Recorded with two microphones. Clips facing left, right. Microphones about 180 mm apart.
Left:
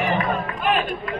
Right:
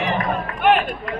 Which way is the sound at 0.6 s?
65° right (ahead or behind).